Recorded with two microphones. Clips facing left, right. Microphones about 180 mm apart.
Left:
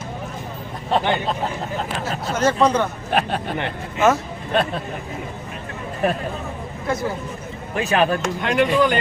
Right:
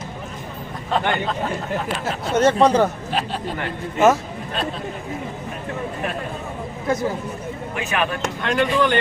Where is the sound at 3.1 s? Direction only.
60° left (ahead or behind).